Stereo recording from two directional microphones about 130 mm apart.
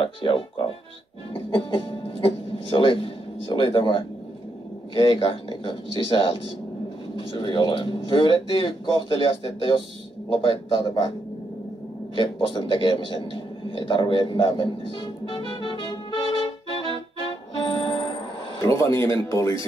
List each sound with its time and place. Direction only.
0.0 s speech: 40° left (ahead or behind)
12.2 s a sound: 40° left (ahead or behind)
18.6 s speech: 20° left (ahead or behind)